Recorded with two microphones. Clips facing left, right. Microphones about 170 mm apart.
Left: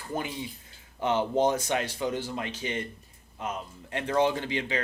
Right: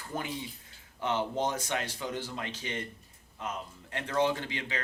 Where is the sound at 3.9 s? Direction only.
20° left (ahead or behind).